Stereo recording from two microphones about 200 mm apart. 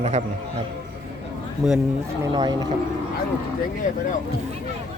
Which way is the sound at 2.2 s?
20° right (ahead or behind).